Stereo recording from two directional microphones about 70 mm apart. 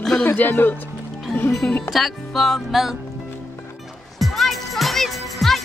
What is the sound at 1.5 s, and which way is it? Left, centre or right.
Speech, centre.